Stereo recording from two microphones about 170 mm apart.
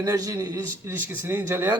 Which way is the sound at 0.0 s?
20° right (ahead or behind).